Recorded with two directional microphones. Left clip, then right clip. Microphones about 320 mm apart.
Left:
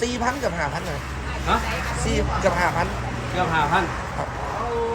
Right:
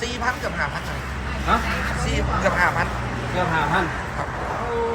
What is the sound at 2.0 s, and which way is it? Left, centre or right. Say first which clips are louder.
Speech: left 2 dB; centre.